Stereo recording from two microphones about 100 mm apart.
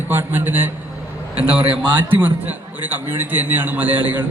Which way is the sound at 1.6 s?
60° right (ahead or behind).